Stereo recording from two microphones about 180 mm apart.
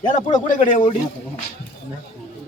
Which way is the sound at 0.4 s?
45° left (ahead or behind).